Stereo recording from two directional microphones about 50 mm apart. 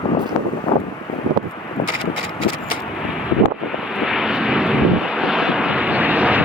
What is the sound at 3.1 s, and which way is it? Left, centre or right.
Vehicle, centre.